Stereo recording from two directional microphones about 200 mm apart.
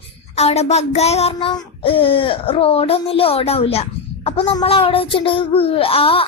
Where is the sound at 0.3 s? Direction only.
30° left (ahead or behind).